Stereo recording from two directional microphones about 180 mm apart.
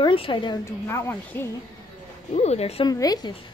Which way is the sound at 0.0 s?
30° left (ahead or behind).